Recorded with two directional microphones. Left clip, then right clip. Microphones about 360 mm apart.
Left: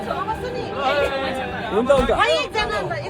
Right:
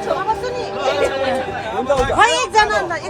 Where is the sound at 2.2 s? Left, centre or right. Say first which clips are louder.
Right 6 dB; right.